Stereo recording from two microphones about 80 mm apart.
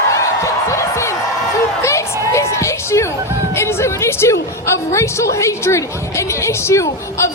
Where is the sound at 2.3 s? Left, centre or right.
Left.